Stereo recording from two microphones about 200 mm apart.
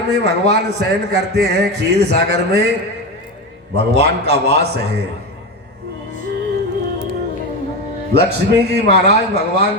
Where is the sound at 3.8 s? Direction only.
55° right (ahead or behind).